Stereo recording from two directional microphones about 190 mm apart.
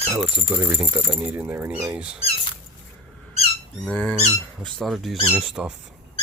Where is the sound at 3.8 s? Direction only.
5° left (ahead or behind).